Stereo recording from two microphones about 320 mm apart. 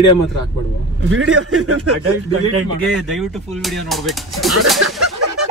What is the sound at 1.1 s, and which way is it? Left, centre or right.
Speech, right.